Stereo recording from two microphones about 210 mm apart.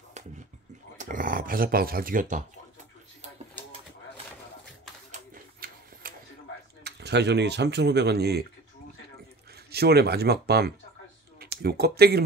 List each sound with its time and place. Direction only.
0.9 s speech: 40° right (ahead or behind)
5.1 s printer: 45° right (ahead or behind)
6.8 s speech: 55° right (ahead or behind)
9.7 s speech: 50° right (ahead or behind)